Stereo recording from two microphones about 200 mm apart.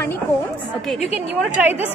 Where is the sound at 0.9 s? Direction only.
30° left (ahead or behind).